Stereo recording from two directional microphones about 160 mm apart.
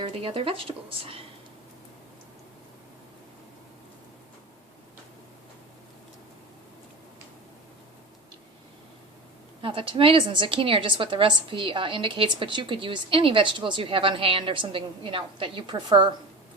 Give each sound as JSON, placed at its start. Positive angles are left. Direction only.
{"t": 0.0, "sound": "a woman's voice", "side_deg": -35}
{"t": 9.6, "sound": "a woman's voice", "side_deg": -35}